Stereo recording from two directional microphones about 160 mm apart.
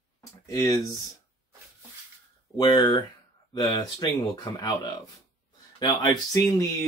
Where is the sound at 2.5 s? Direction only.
25° left (ahead or behind).